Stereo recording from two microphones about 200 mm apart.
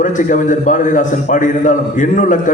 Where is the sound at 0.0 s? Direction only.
40° left (ahead or behind).